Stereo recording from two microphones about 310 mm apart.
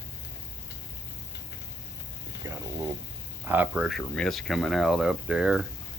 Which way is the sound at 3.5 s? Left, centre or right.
Centre.